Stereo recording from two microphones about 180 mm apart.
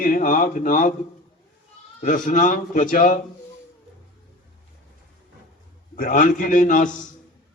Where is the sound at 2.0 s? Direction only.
45° left (ahead or behind).